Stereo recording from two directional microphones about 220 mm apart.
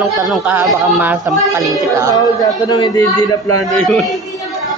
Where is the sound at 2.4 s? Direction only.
20° left (ahead or behind).